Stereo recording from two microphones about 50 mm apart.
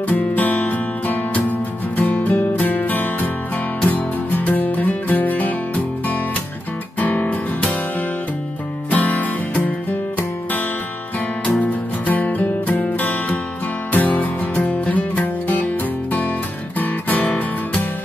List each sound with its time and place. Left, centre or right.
0.1 s music: left
7.0 s music: left
8.9 s music: left
11.6 s music: left